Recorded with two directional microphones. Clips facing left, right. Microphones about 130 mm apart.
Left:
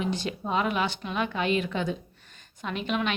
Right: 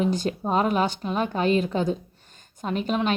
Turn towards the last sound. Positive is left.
turn(degrees=-40)  # may be behind; listen again after turning